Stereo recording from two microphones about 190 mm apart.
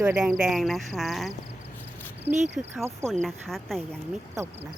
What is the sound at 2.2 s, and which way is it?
Speech, 40° right (ahead or behind).